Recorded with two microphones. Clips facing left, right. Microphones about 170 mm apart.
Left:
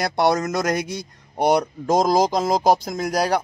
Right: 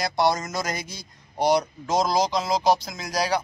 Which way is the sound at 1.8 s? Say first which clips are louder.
Left 5 dB; 45° left (ahead or behind).